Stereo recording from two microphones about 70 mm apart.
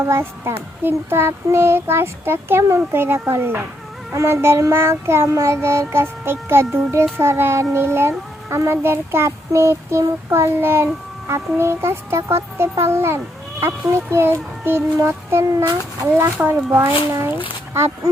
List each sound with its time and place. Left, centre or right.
0.0 s a child's voice: right
8.4 s child singing: right
10.2 s a child's voice: right